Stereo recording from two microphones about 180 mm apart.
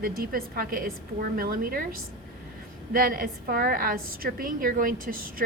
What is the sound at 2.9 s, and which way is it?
A woman's voice, 55° right (ahead or behind).